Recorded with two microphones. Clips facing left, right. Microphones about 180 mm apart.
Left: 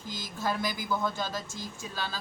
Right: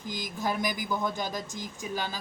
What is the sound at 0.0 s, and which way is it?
A man's voice, 15° right (ahead or behind).